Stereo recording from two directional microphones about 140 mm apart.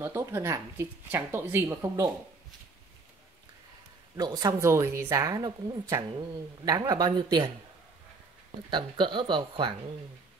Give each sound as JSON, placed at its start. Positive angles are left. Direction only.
{"t": 0.0, "sound": "speech", "side_deg": -20}
{"t": 4.2, "sound": "speech", "side_deg": -25}
{"t": 8.6, "sound": "speech", "side_deg": -35}